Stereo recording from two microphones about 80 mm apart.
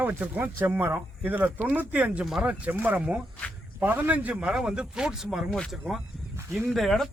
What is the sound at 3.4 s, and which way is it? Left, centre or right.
Speech, centre.